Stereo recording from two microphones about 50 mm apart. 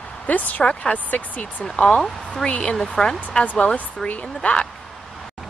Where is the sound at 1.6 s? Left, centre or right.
Centre.